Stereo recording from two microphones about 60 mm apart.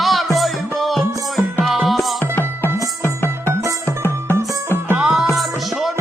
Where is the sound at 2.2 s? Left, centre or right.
Left.